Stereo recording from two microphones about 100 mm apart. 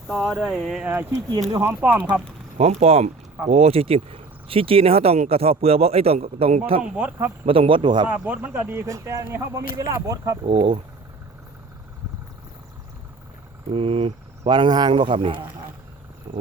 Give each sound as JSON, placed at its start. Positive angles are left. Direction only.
{"t": 0.1, "sound": "speech", "side_deg": 0}
{"t": 0.9, "sound": "speech", "side_deg": -25}
{"t": 2.6, "sound": "speech", "side_deg": -90}
{"t": 6.9, "sound": "speech", "side_deg": -15}
{"t": 7.4, "sound": "speech", "side_deg": -65}
{"t": 8.0, "sound": "speech", "side_deg": -15}
{"t": 10.5, "sound": "speech", "side_deg": -55}
{"t": 13.7, "sound": "speech", "side_deg": -75}
{"t": 14.5, "sound": "speech", "side_deg": -45}